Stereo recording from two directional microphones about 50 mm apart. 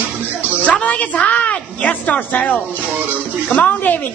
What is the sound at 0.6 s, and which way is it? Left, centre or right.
A woman's voice, left.